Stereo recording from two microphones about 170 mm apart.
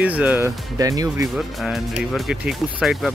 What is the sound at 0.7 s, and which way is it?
Speech, 20° right (ahead or behind).